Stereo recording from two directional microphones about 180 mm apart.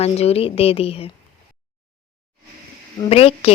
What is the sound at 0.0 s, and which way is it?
A woman's voice, 35° left (ahead or behind).